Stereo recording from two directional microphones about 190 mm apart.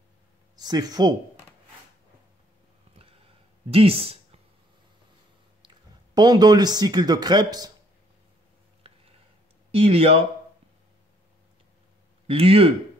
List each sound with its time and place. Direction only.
0.6 s speech: 20° right (ahead or behind)
2.9 s a sound: 30° right (ahead or behind)
3.7 s speech: 30° right (ahead or behind)
6.1 s speech: 20° right (ahead or behind)
8.8 s a sound: 30° right (ahead or behind)
9.7 s speech: 30° right (ahead or behind)
12.3 s speech: 30° right (ahead or behind)